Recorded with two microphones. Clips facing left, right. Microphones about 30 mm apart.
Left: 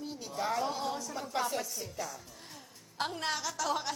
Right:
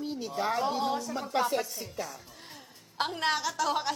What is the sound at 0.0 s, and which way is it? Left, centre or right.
A woman's voice, right.